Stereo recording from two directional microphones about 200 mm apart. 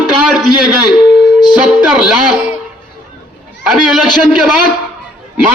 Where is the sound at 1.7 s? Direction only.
Centre (ahead or behind).